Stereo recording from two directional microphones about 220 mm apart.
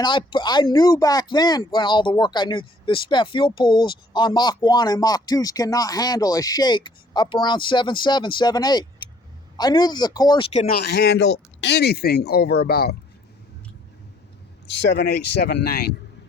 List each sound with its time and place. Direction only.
0.0 s speech: 20° left (ahead or behind); by 13.0 s 45° left (ahead or behind)
14.8 s speech: 50° left (ahead or behind)